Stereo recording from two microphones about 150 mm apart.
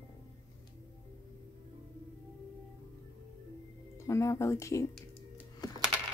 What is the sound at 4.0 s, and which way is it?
Speech, 20° left (ahead or behind).